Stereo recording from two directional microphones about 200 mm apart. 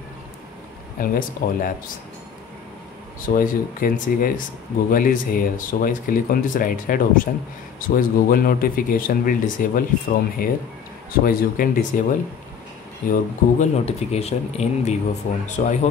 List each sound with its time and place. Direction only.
0.9 s speech: 45° left (ahead or behind)
3.3 s speech: 45° left (ahead or behind)
13.1 s speech: 35° left (ahead or behind)